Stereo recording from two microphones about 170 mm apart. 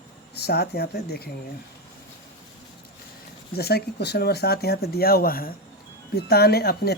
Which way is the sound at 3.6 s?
70° left (ahead or behind).